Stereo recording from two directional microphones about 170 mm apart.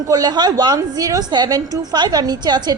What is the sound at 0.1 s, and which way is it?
A woman's voice, 25° right (ahead or behind).